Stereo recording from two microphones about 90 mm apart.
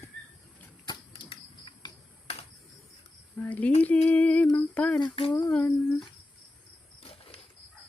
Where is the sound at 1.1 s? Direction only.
75° left (ahead or behind).